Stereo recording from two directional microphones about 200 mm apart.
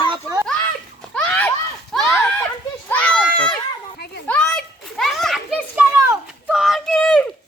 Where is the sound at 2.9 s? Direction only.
5° left (ahead or behind).